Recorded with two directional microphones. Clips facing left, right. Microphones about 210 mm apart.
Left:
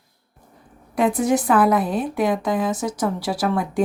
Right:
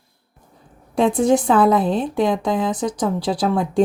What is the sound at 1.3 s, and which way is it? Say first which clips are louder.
Speech: right 2 dB; 25° right (ahead or behind).